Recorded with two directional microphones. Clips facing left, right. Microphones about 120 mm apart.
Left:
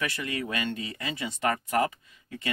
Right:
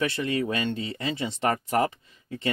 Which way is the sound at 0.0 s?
30° right (ahead or behind).